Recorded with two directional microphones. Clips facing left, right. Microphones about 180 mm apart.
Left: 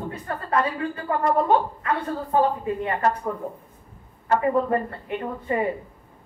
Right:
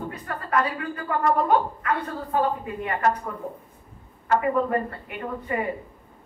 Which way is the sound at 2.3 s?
30° left (ahead or behind).